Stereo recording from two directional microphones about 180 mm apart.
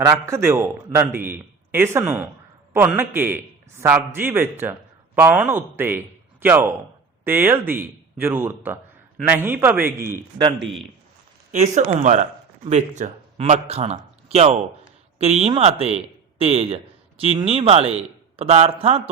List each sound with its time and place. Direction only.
0.0 s a man's voice: 15° right (ahead or behind)
10.1 s a man's voice: 25° right (ahead or behind)
10.6 s a man's voice: centre (ahead or behind)
11.5 s a man's voice: 40° right (ahead or behind)